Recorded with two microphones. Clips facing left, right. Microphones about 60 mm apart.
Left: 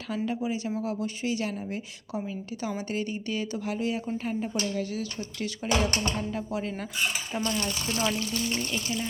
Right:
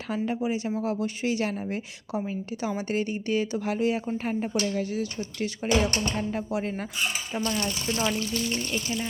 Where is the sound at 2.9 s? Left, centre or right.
Right.